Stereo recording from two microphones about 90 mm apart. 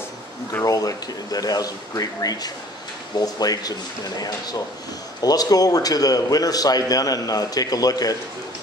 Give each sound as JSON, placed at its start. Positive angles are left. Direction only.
{"t": 0.7, "sound": "a man's voice", "side_deg": 40}